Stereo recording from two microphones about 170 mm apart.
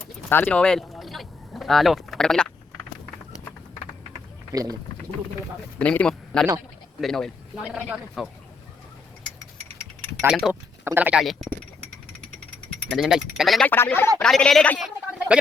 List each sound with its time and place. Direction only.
0.3 s speech: 10° left (ahead or behind)
4.5 s speech: 20° right (ahead or behind)
5.8 s a man's voice: 10° left (ahead or behind)
10.2 s speech: centre (ahead or behind)
10.5 s speech: 10° right (ahead or behind)
12.9 s speech: centre (ahead or behind)
13.7 s a man's voice: 10° left (ahead or behind)